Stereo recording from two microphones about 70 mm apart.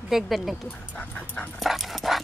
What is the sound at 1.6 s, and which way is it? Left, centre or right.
Dog, centre.